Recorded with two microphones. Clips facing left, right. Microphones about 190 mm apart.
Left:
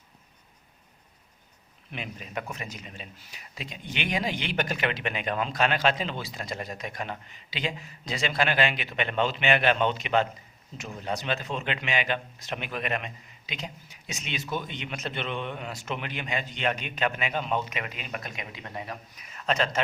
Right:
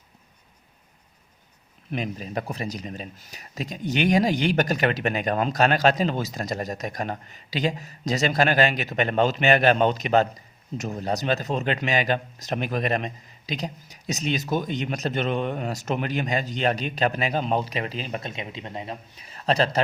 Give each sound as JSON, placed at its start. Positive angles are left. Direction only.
{"t": 1.9, "sound": "speech", "side_deg": -40}